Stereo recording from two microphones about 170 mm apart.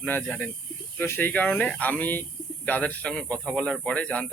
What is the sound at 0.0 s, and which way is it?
Speech, 10° left (ahead or behind).